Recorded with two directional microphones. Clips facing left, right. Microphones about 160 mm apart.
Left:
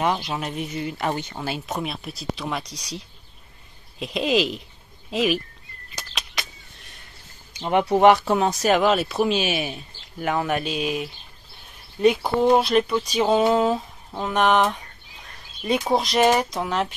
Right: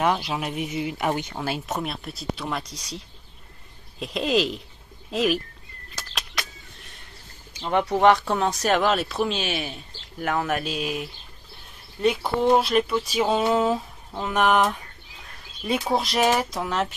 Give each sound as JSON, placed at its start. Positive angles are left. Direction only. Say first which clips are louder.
{"t": 0.0, "sound": "speech", "louder": "even", "side_deg": -5}
{"t": 4.0, "sound": "speech", "louder": "left 1 dB", "side_deg": 5}
{"t": 7.5, "sound": "speech", "louder": "left 3 dB", "side_deg": 15}
{"t": 13.3, "sound": "speech", "louder": "left 3 dB", "side_deg": 5}
{"t": 15.9, "sound": "speech", "louder": "left 3 dB", "side_deg": 0}